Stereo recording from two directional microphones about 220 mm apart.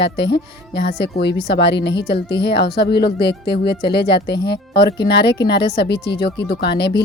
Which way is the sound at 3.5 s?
20° left (ahead or behind).